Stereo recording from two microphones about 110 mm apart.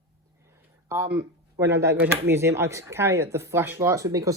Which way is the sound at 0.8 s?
25° right (ahead or behind).